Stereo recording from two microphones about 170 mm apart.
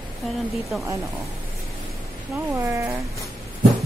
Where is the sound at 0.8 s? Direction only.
20° right (ahead or behind).